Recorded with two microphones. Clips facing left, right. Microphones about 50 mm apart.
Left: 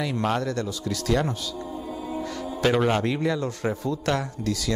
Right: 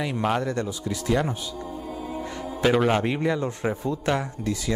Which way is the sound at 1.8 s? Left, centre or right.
Right.